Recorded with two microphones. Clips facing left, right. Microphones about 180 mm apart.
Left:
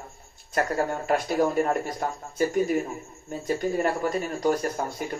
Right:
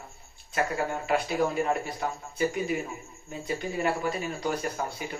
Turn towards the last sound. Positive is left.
turn(degrees=45)  # may be behind; listen again after turning